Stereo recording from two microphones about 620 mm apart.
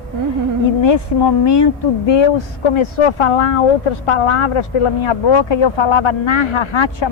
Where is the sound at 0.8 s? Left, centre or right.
Left.